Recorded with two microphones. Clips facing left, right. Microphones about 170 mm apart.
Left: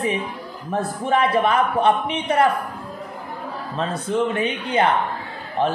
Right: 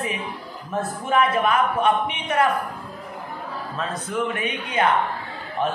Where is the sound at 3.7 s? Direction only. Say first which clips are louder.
Left 5 dB; 30° left (ahead or behind).